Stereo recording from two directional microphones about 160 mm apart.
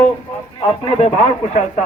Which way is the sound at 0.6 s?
35° left (ahead or behind).